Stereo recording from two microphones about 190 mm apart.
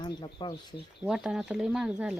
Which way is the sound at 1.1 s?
5° right (ahead or behind).